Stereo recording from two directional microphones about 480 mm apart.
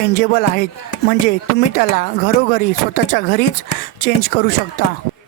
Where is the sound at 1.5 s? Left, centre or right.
Centre.